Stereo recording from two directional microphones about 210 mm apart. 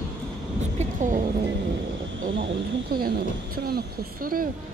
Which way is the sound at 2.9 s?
45° right (ahead or behind).